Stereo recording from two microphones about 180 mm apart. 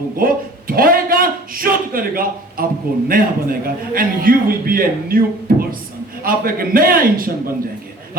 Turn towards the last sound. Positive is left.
turn(degrees=-55)  # may be behind; listen again after turning